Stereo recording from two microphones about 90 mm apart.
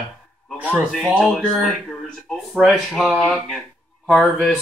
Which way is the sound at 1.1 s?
5° right (ahead or behind).